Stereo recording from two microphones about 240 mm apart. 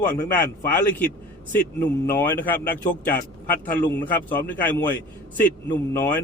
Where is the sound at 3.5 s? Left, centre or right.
Left.